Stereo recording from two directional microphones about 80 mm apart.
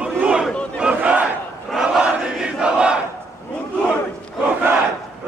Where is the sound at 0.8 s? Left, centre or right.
Centre.